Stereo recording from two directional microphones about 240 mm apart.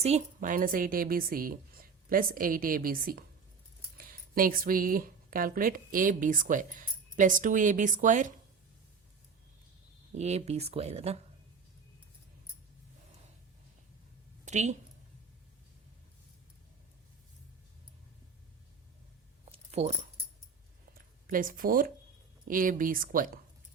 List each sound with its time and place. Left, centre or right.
0.0 s a woman's voice: right
10.2 s speech: right
14.4 s a woman's voice: right
19.5 s keys jangling: right
20.9 s a woman's voice: right